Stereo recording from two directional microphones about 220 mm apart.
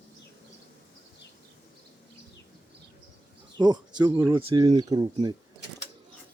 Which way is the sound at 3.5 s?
20° right (ahead or behind).